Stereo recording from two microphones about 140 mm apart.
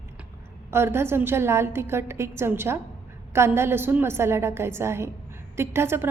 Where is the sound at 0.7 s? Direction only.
15° right (ahead or behind).